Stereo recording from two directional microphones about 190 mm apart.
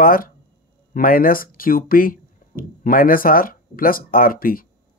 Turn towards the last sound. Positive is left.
turn(degrees=50)  # may be behind; listen again after turning